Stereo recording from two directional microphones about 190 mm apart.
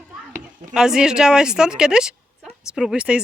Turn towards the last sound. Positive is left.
turn(degrees=-5)  # may be behind; listen again after turning